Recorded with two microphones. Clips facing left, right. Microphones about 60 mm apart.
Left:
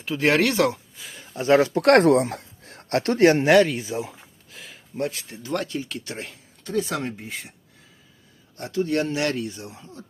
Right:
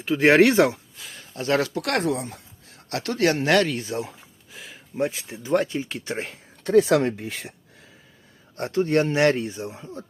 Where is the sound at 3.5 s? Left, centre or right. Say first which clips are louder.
Left 3 dB; centre; by 6.2 s right.